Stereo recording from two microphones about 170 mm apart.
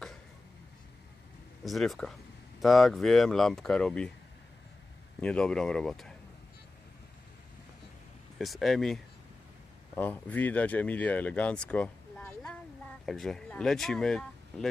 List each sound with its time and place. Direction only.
1.6 s speech: centre (ahead or behind)
5.2 s speech: 5° left (ahead or behind)
8.4 s speech: centre (ahead or behind)